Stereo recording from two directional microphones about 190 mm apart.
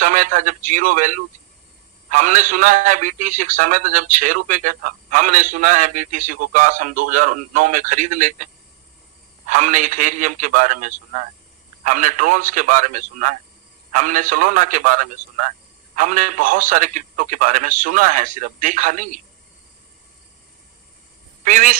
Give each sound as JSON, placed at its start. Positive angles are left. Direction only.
{"t": 0.0, "sound": "a man's voice", "side_deg": -40}
{"t": 9.5, "sound": "a man's voice", "side_deg": -40}
{"t": 21.4, "sound": "a man's voice", "side_deg": -45}